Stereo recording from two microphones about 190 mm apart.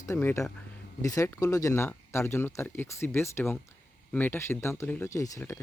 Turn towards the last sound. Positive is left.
turn(degrees=15)  # may be behind; listen again after turning